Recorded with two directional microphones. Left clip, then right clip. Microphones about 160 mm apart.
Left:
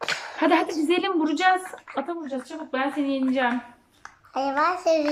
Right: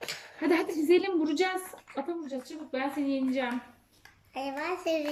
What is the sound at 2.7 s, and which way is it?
Speech, 30° right (ahead or behind).